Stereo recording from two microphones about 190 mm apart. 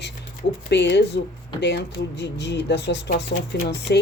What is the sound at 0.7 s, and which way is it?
Speech, 65° left (ahead or behind).